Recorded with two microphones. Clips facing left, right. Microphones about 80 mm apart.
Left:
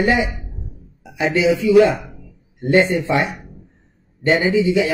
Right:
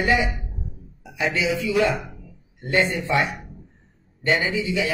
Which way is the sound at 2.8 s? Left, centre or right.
Left.